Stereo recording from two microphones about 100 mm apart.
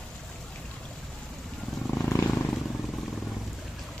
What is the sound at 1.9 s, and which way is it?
Wild animals, 20° left (ahead or behind).